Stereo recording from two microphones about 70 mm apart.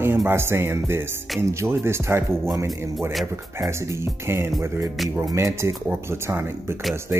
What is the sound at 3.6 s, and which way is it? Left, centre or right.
Speech, right.